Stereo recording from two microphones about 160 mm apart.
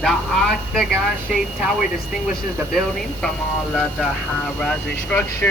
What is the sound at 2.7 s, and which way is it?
Speech, 5° left (ahead or behind).